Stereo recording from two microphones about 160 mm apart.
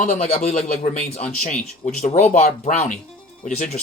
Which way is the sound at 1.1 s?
40° left (ahead or behind).